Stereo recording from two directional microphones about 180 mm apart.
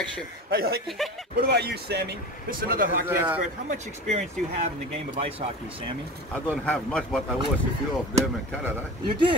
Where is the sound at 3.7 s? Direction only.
40° right (ahead or behind).